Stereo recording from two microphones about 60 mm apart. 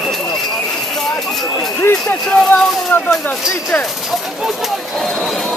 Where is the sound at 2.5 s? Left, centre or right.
Left.